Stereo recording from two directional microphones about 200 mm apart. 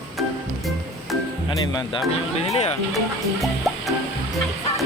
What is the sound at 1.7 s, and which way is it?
Speech, 20° left (ahead or behind).